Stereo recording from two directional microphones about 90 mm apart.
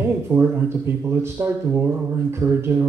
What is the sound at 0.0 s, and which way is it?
Speech, 25° right (ahead or behind).